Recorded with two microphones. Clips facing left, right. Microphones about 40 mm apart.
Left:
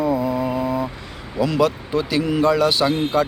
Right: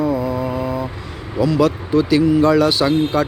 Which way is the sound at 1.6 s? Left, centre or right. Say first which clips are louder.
Right 4 dB; left.